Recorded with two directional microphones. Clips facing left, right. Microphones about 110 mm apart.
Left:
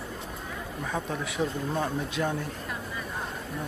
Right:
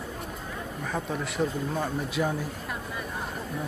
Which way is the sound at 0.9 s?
Centre (ahead or behind).